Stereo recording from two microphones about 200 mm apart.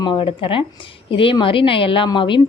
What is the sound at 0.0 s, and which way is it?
A woman's voice, 25° left (ahead or behind).